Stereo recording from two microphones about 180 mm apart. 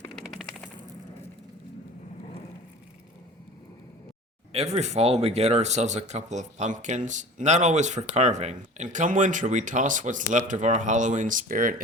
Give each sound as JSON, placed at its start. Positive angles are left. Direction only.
{"t": 0.1, "sound": "machine gun", "side_deg": 0}
{"t": 4.5, "sound": "speech", "side_deg": -35}